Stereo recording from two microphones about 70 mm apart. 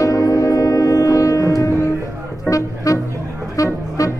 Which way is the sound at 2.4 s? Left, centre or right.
Left.